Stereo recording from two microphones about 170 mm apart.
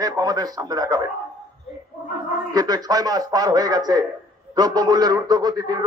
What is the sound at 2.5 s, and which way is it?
A man's voice, 20° right (ahead or behind).